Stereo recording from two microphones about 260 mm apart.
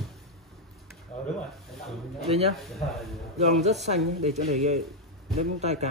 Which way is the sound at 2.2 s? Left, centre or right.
Right.